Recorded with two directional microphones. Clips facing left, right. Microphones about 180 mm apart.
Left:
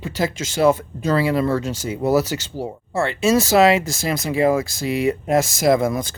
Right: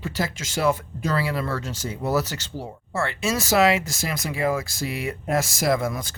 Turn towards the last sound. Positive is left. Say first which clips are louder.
# left 6 dB
turn(degrees=20)  # may be behind; listen again after turning